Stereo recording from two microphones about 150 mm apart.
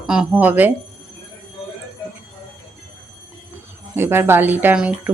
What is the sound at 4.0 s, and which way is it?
Speech, 15° right (ahead or behind).